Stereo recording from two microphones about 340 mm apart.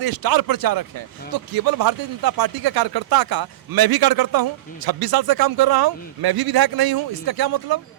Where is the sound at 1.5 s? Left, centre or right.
Right.